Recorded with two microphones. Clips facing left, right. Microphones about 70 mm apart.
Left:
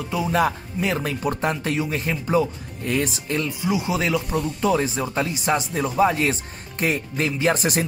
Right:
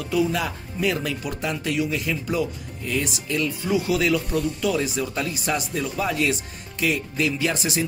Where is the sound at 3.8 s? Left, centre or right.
Left.